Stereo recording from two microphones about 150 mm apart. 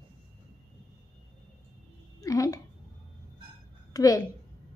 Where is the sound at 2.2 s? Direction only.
20° left (ahead or behind).